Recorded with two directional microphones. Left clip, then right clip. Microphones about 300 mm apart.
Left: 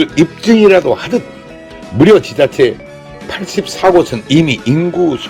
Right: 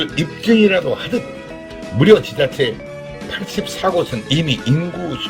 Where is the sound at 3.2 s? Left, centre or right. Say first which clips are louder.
Left 6 dB; centre.